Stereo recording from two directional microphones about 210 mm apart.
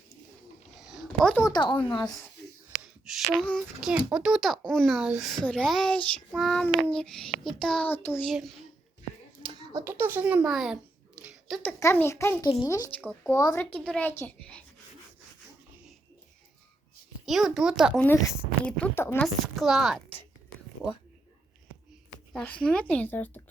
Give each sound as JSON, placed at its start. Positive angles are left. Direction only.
{"t": 0.8, "sound": "a sound", "side_deg": 0}
{"t": 1.4, "sound": "speech", "side_deg": 20}
{"t": 2.8, "sound": "speech", "side_deg": 0}
{"t": 9.4, "sound": "hands", "side_deg": -25}
{"t": 9.8, "sound": "a child's voice", "side_deg": -10}
{"t": 11.2, "sound": "a sound", "side_deg": 0}
{"t": 11.8, "sound": "a woman's voice", "side_deg": 10}
{"t": 17.2, "sound": "speech", "side_deg": 0}
{"t": 18.0, "sound": "speech", "side_deg": 10}
{"t": 22.3, "sound": "a woman's voice", "side_deg": 5}